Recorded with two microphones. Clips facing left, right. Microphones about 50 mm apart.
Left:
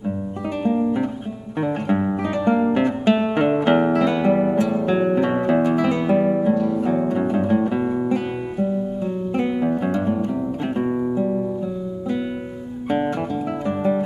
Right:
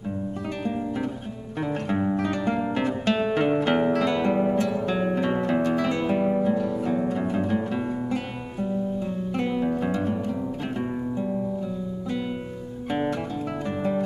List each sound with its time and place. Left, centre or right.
0.7 s music: centre
10.8 s guitar: centre
13.7 s music: centre